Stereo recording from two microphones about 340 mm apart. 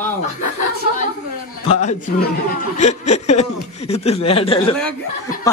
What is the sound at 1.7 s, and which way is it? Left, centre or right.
Speech, centre.